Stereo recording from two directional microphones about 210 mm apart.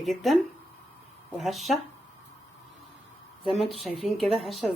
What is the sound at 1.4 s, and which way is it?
Speech, centre (ahead or behind).